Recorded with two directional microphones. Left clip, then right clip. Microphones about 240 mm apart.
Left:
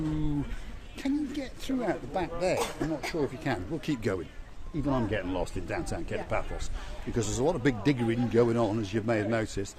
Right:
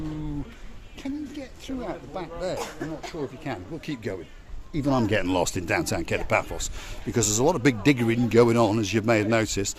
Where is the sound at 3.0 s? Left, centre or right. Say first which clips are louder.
Left 2 dB; centre.